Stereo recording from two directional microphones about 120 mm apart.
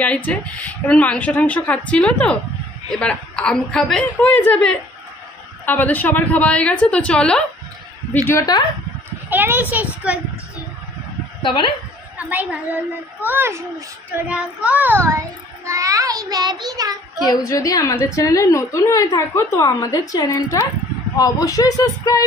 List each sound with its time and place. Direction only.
0.0 s speech: 10° left (ahead or behind)
8.5 s speech: 35° left (ahead or behind)
9.3 s a woman's voice: 15° right (ahead or behind)
11.4 s speech: 45° left (ahead or behind)
12.2 s a woman's voice: 10° right (ahead or behind)
14.2 s child singing: 10° right (ahead or behind); by 16.9 s 35° right (ahead or behind)
17.3 s a woman's voice: 30° left (ahead or behind)